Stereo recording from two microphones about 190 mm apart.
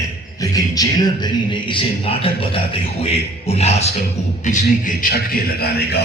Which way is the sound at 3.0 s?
35° left (ahead or behind).